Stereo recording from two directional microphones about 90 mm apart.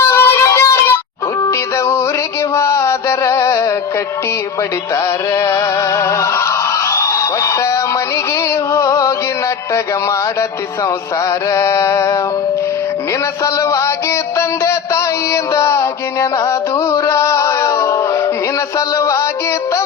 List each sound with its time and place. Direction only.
0.0 s music: 25° left (ahead or behind)
2.6 s music: 35° left (ahead or behind)
5.3 s music: 35° left (ahead or behind)
6.9 s a sound: 35° left (ahead or behind)
8.7 s music: 35° left (ahead or behind)
11.5 s music: 35° left (ahead or behind)
13.4 s music: 35° left (ahead or behind)
16.5 s a sound: 35° left (ahead or behind)
18.9 s music: 35° left (ahead or behind)